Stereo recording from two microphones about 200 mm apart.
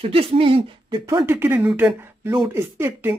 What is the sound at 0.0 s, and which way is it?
Speech, 30° right (ahead or behind).